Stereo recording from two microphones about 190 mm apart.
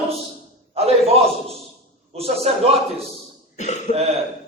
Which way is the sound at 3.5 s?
40° left (ahead or behind).